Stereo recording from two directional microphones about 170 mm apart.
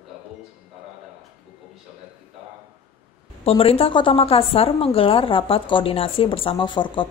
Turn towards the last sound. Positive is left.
turn(degrees=30)  # may be behind; listen again after turning